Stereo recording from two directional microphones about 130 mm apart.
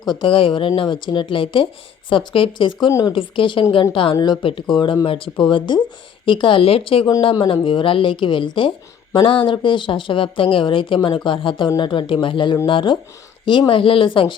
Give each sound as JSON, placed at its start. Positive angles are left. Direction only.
{"t": 0.1, "sound": "speech", "side_deg": 40}